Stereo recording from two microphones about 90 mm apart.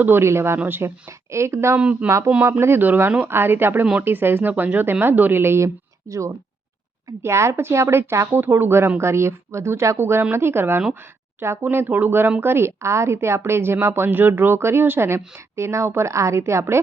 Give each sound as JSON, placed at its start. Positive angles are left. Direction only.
{"t": 0.0, "sound": "a woman's voice", "side_deg": -25}
{"t": 1.7, "sound": "speech", "side_deg": -15}
{"t": 2.0, "sound": "a woman's voice", "side_deg": -35}